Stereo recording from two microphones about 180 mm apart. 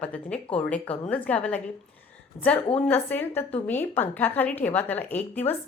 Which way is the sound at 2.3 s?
40° left (ahead or behind).